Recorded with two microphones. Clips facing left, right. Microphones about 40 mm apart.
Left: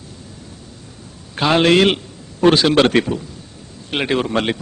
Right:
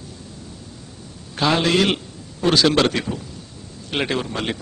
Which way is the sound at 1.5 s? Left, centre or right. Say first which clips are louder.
Left 8 dB; left.